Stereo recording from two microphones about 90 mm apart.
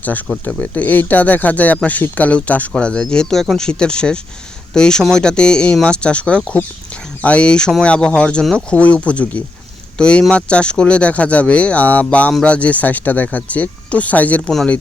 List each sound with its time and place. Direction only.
0.0 s speech: 20° left (ahead or behind)